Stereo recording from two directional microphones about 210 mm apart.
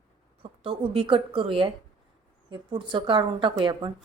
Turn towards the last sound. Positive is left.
turn(degrees=-20)  # may be behind; listen again after turning